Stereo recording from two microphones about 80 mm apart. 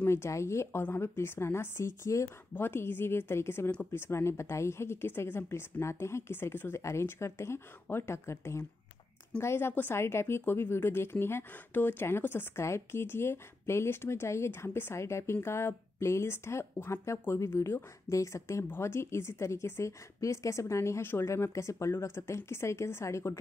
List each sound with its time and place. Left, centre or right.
0.0 s speech: left